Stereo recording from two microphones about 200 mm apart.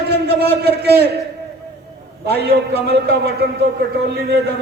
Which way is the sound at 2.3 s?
55° right (ahead or behind).